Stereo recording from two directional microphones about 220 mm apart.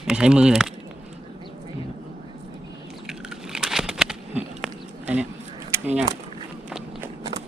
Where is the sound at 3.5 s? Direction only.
Centre (ahead or behind).